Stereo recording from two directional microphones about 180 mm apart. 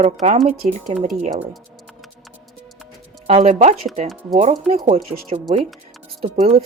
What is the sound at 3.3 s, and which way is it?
A woman's voice, 40° right (ahead or behind).